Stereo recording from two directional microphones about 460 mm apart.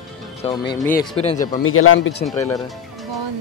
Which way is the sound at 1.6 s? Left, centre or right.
Left.